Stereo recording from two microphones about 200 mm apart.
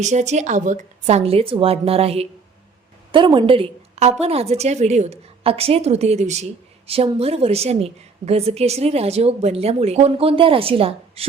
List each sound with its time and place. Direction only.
0.0 s a woman's voice: 35° right (ahead or behind)